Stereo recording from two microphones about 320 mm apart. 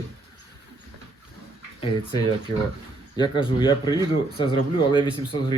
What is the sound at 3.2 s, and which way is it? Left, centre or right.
Speech, centre.